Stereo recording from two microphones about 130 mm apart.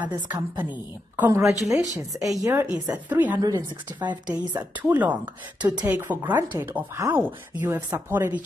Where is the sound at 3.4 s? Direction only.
30° right (ahead or behind).